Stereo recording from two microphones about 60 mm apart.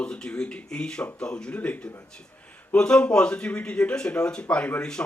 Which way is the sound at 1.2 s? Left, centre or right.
Centre.